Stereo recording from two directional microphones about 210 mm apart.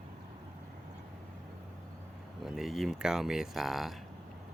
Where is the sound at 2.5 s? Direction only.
Centre (ahead or behind).